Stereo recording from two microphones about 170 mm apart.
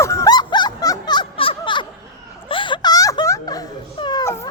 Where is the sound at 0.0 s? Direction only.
20° left (ahead or behind).